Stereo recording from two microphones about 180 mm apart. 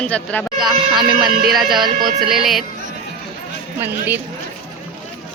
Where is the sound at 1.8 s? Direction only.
25° right (ahead or behind).